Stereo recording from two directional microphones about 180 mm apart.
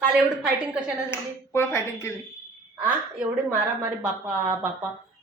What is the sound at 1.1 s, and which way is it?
Speech, 15° left (ahead or behind).